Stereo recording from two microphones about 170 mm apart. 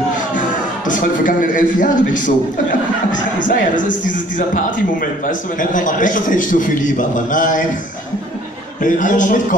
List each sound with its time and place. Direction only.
0.3 s a man's voice: 50° left (ahead or behind)
8.8 s a man's voice: 50° left (ahead or behind)